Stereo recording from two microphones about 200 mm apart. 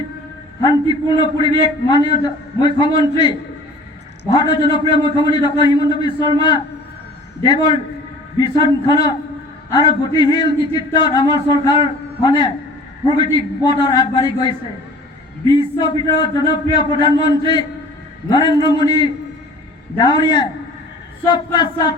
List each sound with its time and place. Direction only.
0.6 s a man's voice: 20° left (ahead or behind)